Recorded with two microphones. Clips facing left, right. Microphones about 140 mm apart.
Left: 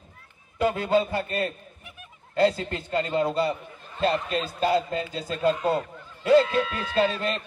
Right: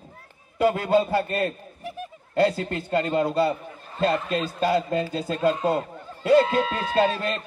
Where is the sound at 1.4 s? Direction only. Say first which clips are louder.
Right 5 dB; 35° right (ahead or behind).